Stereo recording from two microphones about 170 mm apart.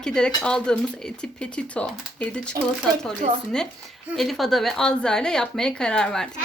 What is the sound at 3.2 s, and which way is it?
Speech, 45° right (ahead or behind).